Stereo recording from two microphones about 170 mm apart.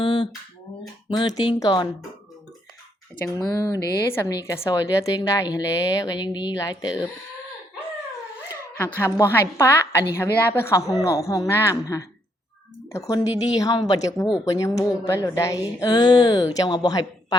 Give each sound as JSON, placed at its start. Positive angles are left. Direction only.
{"t": 0.0, "sound": "a sound", "side_deg": 25}
{"t": 1.1, "sound": "a woman's voice", "side_deg": 25}
{"t": 3.3, "sound": "a woman's voice", "side_deg": 20}
{"t": 8.4, "sound": "a woman's voice", "side_deg": 15}